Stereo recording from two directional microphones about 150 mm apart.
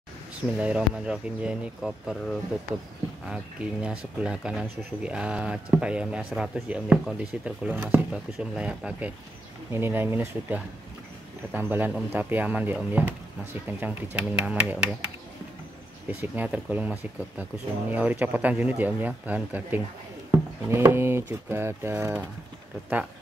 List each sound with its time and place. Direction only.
0.6 s speech: 10° right (ahead or behind)
3.8 s speech: 5° right (ahead or behind)
16.1 s speech: 10° right (ahead or behind)